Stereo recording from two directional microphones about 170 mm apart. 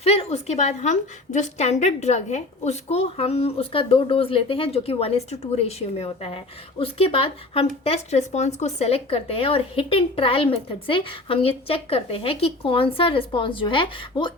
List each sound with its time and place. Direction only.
0.0 s a woman's voice: 35° left (ahead or behind)